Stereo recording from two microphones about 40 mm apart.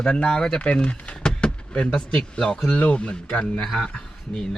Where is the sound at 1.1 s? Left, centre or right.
Centre.